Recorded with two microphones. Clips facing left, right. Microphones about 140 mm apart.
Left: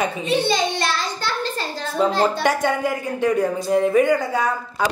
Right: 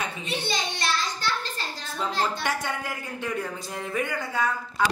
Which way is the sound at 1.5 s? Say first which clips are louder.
Left 10 dB; 65° left (ahead or behind).